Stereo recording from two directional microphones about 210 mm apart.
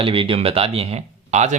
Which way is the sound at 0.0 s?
25° right (ahead or behind).